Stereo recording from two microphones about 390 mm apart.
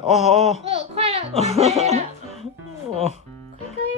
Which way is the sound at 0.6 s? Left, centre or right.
Centre.